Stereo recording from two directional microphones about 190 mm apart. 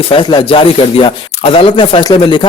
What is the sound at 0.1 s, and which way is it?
Speech, 25° left (ahead or behind).